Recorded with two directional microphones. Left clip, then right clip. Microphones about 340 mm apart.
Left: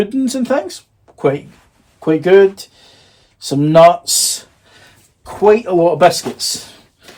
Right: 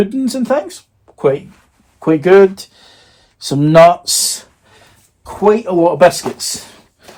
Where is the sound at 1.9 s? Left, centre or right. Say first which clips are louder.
Right 1 dB; right.